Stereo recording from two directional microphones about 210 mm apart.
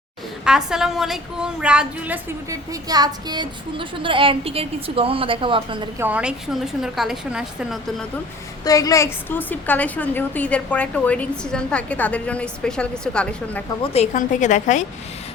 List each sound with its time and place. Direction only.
0.4 s a woman's voice: 5° right (ahead or behind)
2.5 s speech: 20° right (ahead or behind)
6.0 s a woman's voice: 5° right (ahead or behind)
8.6 s a woman's voice: 15° left (ahead or behind)
13.9 s a woman's voice: 35° left (ahead or behind)